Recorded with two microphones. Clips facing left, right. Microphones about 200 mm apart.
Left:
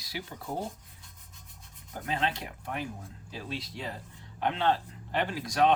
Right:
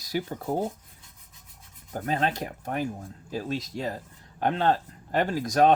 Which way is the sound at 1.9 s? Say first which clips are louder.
Right 5 dB; 45° right (ahead or behind).